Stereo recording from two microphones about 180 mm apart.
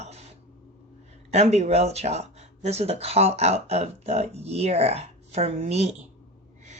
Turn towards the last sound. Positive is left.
turn(degrees=-35)  # may be behind; listen again after turning